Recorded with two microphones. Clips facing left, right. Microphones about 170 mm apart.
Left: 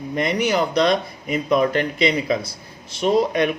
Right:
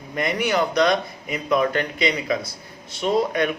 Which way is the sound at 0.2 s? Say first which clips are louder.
Left 1 dB; 25° left (ahead or behind).